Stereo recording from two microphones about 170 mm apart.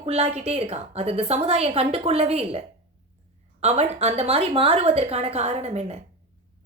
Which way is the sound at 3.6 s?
40° right (ahead or behind).